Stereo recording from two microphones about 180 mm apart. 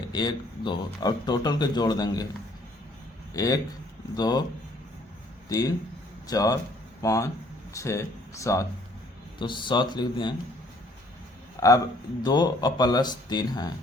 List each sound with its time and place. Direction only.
0.1 s speech: 25° left (ahead or behind)
3.3 s speech: 20° left (ahead or behind)
5.5 s speech: 20° left (ahead or behind)
11.6 s a man's voice: 15° left (ahead or behind)